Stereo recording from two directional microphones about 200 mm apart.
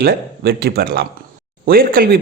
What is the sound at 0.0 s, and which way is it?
Speech, 50° right (ahead or behind).